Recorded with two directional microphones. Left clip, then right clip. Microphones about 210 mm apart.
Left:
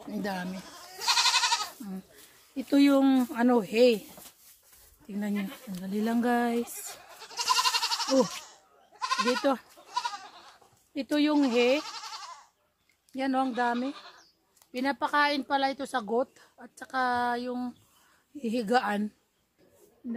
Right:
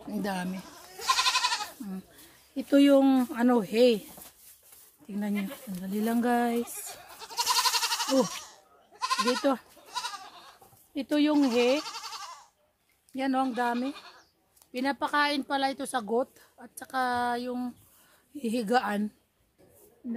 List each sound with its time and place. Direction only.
0.1 s speech: 15° right (ahead or behind)
2.5 s speech: centre (ahead or behind)
7.2 s goat: 35° right (ahead or behind)
9.4 s speech: 10° right (ahead or behind)
9.8 s goat: 50° right (ahead or behind)
11.0 s speech: 10° right (ahead or behind)
11.8 s goat: 50° right (ahead or behind)
13.1 s speech: 10° right (ahead or behind)